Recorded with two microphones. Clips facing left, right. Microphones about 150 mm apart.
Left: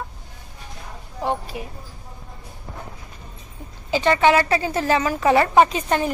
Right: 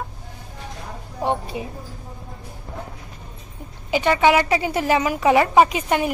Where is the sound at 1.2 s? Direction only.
20° right (ahead or behind).